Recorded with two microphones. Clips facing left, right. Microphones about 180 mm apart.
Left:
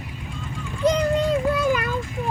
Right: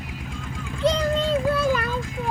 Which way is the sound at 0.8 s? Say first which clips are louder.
Left 2 dB; 15° left (ahead or behind).